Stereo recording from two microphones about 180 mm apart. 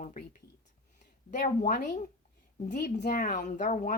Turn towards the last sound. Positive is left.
turn(degrees=50)  # may be behind; listen again after turning